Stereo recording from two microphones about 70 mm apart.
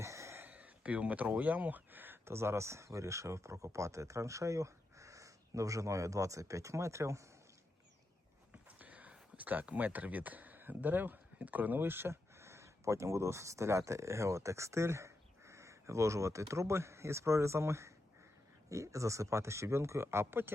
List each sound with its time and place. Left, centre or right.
0.0 s a sound: right
0.3 s speech: right
2.2 s speech: right
8.8 s speech: right